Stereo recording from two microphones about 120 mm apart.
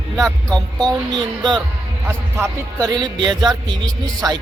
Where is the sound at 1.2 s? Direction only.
40° right (ahead or behind).